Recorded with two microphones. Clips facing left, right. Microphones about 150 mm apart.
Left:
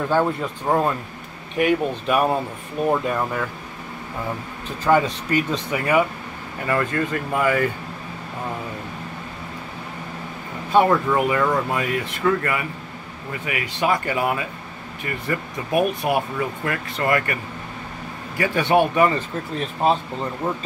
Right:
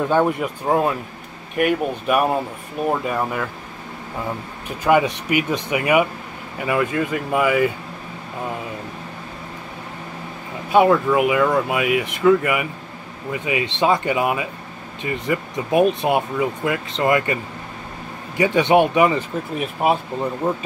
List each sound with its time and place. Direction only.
0.1 s speech: 15° right (ahead or behind)
0.7 s speech: 5° right (ahead or behind)
4.6 s speech: 15° right (ahead or behind)
10.7 s speech: 10° right (ahead or behind)
18.4 s speech: 20° right (ahead or behind)